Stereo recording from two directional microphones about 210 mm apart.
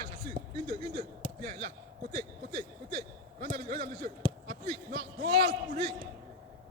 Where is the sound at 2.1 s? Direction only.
25° right (ahead or behind).